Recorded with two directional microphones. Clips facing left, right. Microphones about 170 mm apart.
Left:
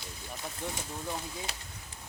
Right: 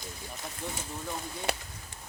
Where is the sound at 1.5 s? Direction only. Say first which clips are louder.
Right 12 dB; 60° right (ahead or behind).